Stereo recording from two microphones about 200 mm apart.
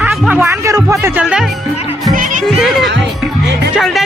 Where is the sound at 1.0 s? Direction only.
5° right (ahead or behind).